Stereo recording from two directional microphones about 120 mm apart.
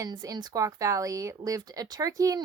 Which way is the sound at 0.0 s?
30° right (ahead or behind).